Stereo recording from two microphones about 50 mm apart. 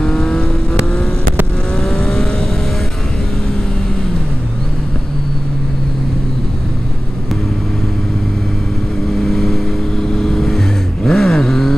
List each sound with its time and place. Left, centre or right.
0.0 s vehicle: centre
1.8 s vehicle: centre
9.2 s vehicle: centre